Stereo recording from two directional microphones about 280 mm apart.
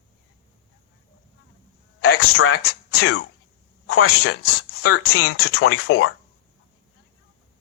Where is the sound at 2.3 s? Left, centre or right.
Left.